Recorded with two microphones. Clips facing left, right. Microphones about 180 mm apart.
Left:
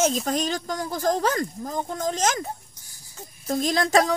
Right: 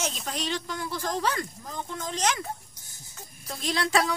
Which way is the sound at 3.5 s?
45° left (ahead or behind).